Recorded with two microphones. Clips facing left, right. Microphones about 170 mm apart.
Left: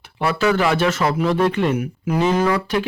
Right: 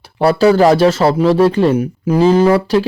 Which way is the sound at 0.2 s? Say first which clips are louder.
Right 8 dB; 35° right (ahead or behind).